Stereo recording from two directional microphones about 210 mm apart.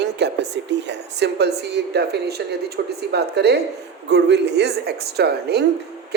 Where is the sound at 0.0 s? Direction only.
55° right (ahead or behind).